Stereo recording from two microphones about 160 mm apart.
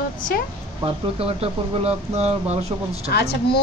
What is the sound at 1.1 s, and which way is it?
Speech, 40° right (ahead or behind).